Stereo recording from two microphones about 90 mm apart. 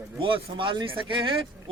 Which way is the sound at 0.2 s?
75° right (ahead or behind).